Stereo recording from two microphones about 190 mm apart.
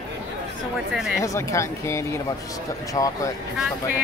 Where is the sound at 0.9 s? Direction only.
5° right (ahead or behind).